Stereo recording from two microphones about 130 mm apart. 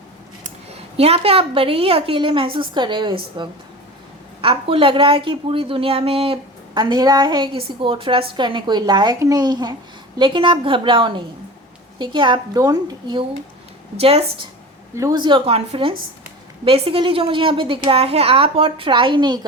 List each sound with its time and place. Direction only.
0.4 s a woman's voice: 50° right (ahead or behind); by 13.2 s 35° right (ahead or behind)
14.0 s a woman's voice: 50° right (ahead or behind)
14.9 s a woman's voice: 25° right (ahead or behind)
15.2 s a woman's voice: 45° right (ahead or behind)